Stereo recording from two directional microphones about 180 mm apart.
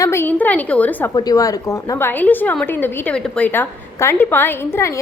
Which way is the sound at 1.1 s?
20° left (ahead or behind).